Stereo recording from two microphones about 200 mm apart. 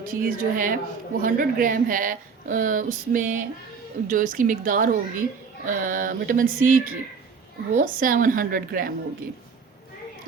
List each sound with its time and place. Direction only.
0.0 s a woman's voice: 45° right (ahead or behind)